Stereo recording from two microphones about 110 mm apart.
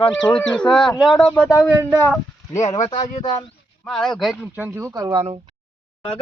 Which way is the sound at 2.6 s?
90° left.